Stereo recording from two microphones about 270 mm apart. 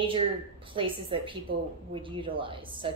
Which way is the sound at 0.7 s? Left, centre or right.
Centre.